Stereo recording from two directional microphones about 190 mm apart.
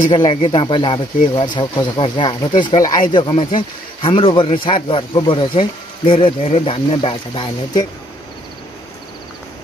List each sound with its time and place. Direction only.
0.1 s speech: 25° left (ahead or behind)